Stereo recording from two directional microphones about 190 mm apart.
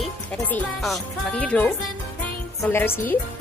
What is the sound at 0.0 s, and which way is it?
Speech, 10° left (ahead or behind).